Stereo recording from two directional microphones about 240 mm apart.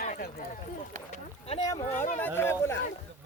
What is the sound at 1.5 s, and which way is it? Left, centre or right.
Speech, centre.